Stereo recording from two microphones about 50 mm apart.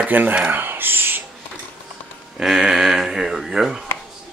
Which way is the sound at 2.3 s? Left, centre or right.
Centre.